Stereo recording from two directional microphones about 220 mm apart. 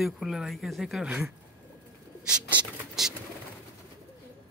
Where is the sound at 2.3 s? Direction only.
5° right (ahead or behind).